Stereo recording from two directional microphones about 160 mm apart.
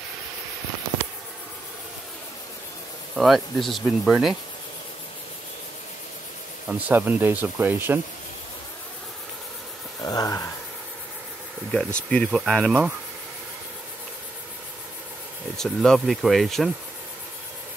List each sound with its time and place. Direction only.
3.2 s speech: centre (ahead or behind)
6.7 s speech: 10° right (ahead or behind)
10.0 s speech: 20° left (ahead or behind)
11.7 s speech: 5° left (ahead or behind)
15.5 s speech: 5° left (ahead or behind)